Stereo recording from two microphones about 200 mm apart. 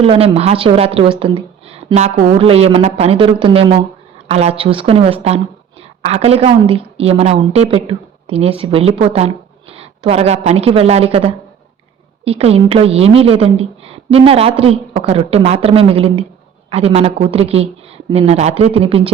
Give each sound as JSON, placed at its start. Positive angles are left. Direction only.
{"t": 0.0, "sound": "a woman's voice", "side_deg": -30}